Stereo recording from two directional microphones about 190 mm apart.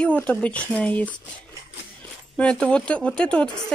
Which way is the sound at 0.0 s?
10° left (ahead or behind).